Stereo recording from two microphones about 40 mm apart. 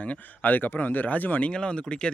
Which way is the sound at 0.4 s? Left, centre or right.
Left.